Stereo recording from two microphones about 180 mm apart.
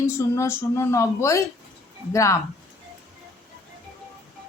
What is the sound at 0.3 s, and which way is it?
A woman's voice, 15° left (ahead or behind).